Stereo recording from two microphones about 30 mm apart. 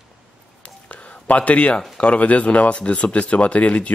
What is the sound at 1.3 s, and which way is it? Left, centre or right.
Speech, left.